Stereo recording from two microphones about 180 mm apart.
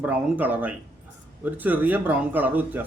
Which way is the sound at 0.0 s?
10° right (ahead or behind).